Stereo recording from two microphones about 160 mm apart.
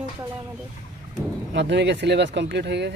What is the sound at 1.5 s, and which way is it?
Speech, 90° right.